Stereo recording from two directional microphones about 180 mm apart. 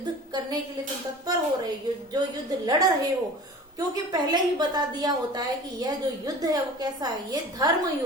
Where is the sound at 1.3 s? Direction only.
20° right (ahead or behind).